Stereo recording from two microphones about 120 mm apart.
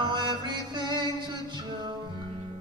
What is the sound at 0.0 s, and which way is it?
Music, 40° right (ahead or behind).